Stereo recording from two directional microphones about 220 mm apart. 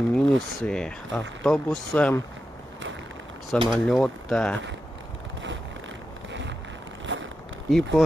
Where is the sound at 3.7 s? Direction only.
5° left (ahead or behind).